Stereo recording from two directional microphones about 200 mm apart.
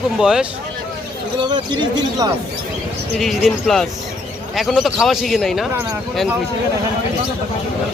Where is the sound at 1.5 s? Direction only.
25° right (ahead or behind).